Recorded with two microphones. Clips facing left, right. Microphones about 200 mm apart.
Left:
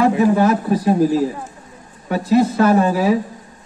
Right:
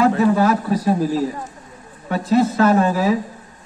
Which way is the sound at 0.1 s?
15° left (ahead or behind).